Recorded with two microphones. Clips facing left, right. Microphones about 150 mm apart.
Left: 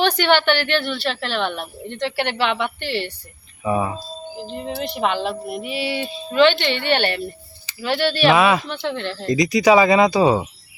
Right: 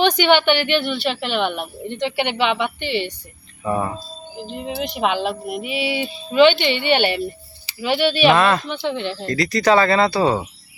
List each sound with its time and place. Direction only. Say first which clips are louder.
0.0 s a woman's voice: right 2 dB; centre (ahead or behind)
4.5 s a woman's voice: right 1 dB; 10° right (ahead or behind)
9.2 s speech: left 3 dB; 15° left (ahead or behind)